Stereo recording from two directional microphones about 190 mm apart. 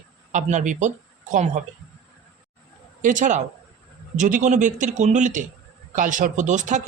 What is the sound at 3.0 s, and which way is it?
A man's voice, 40° right (ahead or behind).